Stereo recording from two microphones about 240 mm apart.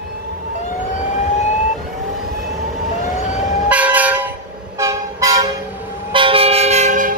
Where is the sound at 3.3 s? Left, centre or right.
Centre.